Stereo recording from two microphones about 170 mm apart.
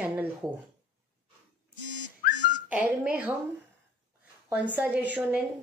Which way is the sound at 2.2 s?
60° left (ahead or behind).